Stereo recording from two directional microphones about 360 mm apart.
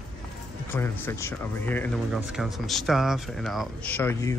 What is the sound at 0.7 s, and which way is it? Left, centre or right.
Speech, centre.